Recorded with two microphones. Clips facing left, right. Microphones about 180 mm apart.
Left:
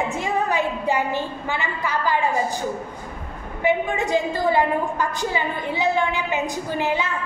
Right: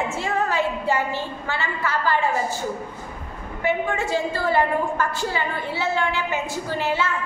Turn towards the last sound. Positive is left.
turn(degrees=15)  # may be behind; listen again after turning